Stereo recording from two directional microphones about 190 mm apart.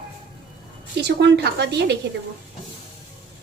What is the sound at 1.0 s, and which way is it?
Speech, 60° right (ahead or behind).